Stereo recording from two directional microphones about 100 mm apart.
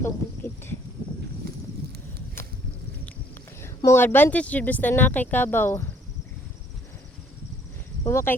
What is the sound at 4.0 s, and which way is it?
Speech, 20° left (ahead or behind).